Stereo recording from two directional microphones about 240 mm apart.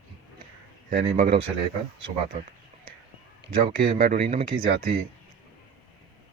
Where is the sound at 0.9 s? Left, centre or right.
Right.